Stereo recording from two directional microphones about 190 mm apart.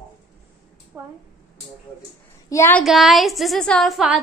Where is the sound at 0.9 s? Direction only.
10° right (ahead or behind).